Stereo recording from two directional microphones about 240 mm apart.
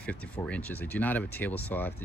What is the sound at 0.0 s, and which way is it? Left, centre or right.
Speech, centre.